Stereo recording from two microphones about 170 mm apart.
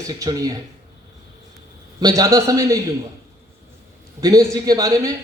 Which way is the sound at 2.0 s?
20° right (ahead or behind).